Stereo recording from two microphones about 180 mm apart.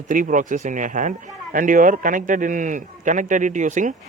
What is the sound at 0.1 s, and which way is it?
Speech, 45° right (ahead or behind).